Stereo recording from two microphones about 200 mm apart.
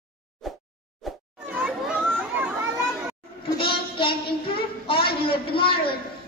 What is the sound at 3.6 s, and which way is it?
Child singing, 25° left (ahead or behind).